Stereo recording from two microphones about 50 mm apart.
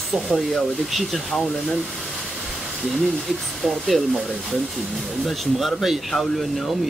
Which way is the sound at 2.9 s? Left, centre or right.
Centre.